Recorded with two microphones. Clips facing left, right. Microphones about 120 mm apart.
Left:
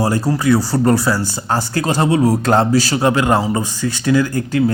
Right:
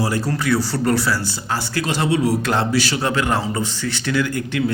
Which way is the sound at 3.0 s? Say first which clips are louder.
Left 6 dB; 20° left (ahead or behind).